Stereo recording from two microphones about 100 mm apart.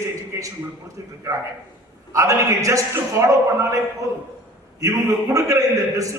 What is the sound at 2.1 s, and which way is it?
A man's voice, 30° right (ahead or behind).